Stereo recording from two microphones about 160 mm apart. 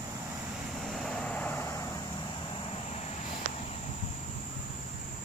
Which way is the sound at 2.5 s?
35° left (ahead or behind).